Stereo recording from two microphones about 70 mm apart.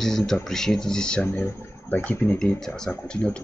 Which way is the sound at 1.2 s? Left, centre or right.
Left.